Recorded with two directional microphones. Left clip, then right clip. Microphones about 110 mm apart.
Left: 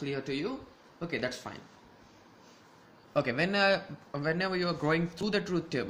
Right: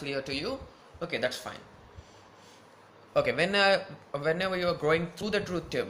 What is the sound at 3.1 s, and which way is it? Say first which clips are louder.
A man's voice: right 3 dB; 30° left (ahead or behind).